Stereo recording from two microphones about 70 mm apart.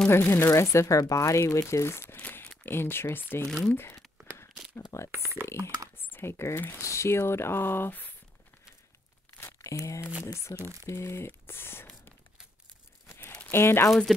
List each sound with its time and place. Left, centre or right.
0.1 s speech: left
2.2 s a sound: left
2.6 s speech: left
3.4 s speech: centre
3.7 s speech: left
5.1 s speech: right
5.9 s computer keyboard: left
6.8 s speech: left
9.6 s speech: left
13.5 s speech: left